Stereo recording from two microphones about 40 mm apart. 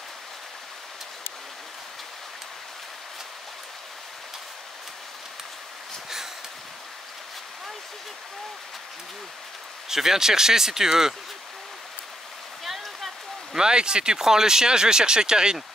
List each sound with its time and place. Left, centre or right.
9.8 s speech: centre
12.6 s a sound: centre
13.6 s speech: centre